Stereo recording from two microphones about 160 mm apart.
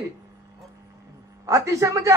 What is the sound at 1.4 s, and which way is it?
Speech, 20° right (ahead or behind).